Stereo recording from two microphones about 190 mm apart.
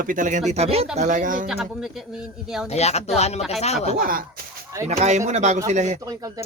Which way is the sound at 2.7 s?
35° left (ahead or behind).